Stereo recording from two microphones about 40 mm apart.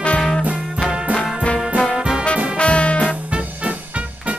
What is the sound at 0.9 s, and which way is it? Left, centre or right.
Music, right.